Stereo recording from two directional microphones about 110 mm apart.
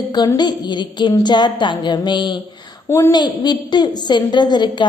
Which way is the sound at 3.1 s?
40° left (ahead or behind).